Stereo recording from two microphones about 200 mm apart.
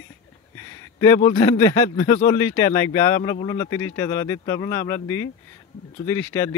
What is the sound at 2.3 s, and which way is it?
Speech, 15° left (ahead or behind).